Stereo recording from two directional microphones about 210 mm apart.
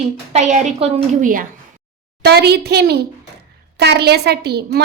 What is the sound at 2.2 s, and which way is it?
A woman's voice, 50° right (ahead or behind).